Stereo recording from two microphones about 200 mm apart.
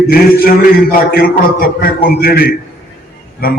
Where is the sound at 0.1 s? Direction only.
45° left (ahead or behind).